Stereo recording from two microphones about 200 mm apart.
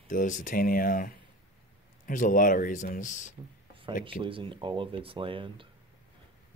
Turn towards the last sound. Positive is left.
turn(degrees=-25)  # may be behind; listen again after turning